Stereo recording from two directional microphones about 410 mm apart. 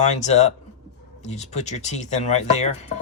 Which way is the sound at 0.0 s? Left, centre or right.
Centre.